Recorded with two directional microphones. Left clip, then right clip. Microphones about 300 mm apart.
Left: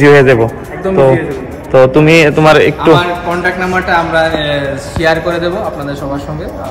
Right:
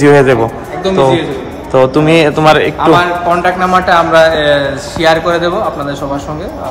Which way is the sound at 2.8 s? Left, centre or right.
Right.